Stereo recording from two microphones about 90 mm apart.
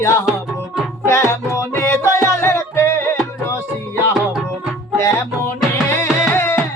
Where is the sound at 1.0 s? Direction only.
30° left (ahead or behind).